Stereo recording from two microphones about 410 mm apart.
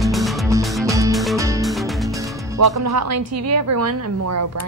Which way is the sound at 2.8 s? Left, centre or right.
Right.